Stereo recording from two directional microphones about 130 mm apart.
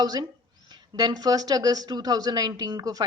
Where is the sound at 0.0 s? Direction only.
30° right (ahead or behind).